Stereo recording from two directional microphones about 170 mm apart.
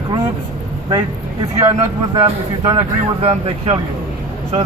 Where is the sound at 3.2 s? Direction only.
35° right (ahead or behind).